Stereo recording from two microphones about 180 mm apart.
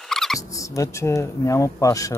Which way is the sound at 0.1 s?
Centre (ahead or behind).